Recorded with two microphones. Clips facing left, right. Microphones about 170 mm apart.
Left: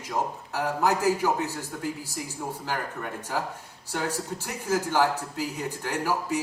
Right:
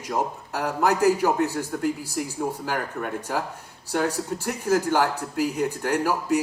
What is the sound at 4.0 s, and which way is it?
Speech, 60° right (ahead or behind).